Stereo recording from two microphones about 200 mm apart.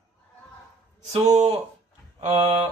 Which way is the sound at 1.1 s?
30° right (ahead or behind).